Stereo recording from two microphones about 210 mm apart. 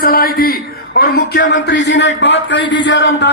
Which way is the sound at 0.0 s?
45° left (ahead or behind).